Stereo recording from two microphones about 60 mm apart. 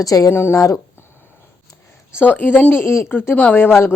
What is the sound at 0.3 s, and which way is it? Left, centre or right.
Speech, left.